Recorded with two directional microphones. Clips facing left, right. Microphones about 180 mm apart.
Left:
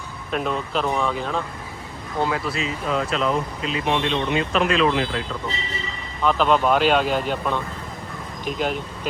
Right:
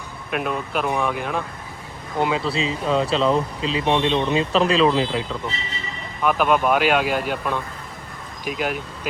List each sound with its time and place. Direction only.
0.3 s speech: 10° right (ahead or behind); by 4.9 s 30° right (ahead or behind)
6.2 s speech: 10° right (ahead or behind)